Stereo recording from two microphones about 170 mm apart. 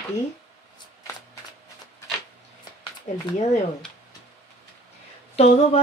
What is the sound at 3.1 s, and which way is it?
Speech, 40° left (ahead or behind).